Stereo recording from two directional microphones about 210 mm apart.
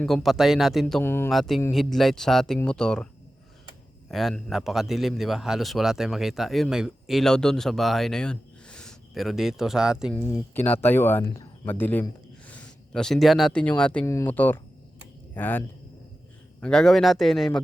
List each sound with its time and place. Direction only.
0.0 s a man's voice: centre (ahead or behind)
4.1 s a man's voice: centre (ahead or behind)